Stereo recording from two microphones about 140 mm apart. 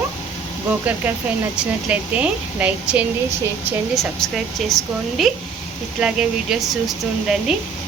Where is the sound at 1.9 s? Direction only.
10° right (ahead or behind).